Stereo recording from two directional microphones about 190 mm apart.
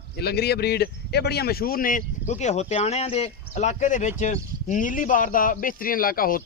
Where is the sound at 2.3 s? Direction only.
35° left (ahead or behind).